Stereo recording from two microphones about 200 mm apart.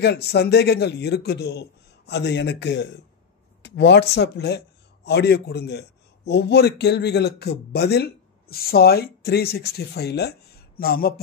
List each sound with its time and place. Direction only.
0.0 s a man's voice: 55° left (ahead or behind)